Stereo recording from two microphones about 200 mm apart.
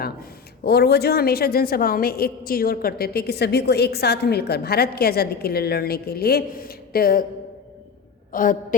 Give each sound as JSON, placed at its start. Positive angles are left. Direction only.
{"t": 0.0, "sound": "speech", "side_deg": 50}
{"t": 8.3, "sound": "a woman's voice", "side_deg": 40}